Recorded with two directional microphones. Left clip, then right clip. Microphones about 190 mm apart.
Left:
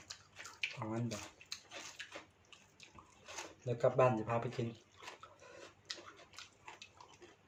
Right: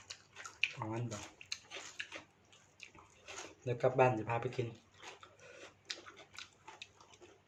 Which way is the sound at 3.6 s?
20° right (ahead or behind).